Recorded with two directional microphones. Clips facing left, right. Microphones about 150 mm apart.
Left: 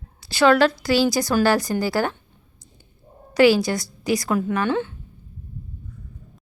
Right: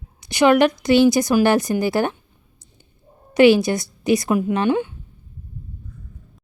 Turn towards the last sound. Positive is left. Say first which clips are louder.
# right 3 dB
turn(degrees=-15)  # may be behind; listen again after turning